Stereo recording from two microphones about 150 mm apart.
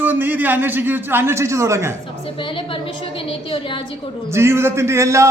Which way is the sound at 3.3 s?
35° left (ahead or behind).